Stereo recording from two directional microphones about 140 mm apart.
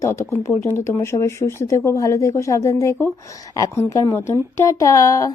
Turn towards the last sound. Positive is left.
turn(degrees=25)  # may be behind; listen again after turning